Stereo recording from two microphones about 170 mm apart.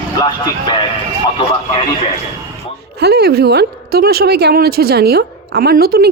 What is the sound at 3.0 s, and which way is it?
Speech, 70° right (ahead or behind).